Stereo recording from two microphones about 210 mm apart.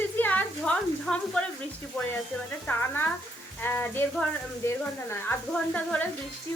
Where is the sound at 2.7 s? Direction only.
10° left (ahead or behind).